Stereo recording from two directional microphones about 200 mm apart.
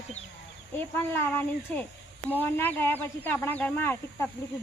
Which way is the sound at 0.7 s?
10° left (ahead or behind).